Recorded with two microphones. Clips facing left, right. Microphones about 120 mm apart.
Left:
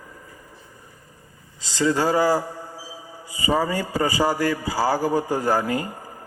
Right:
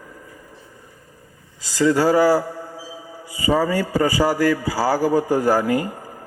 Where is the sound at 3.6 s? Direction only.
25° left (ahead or behind).